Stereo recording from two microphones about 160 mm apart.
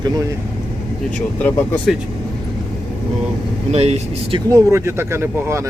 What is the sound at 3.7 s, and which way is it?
Speech, 40° right (ahead or behind).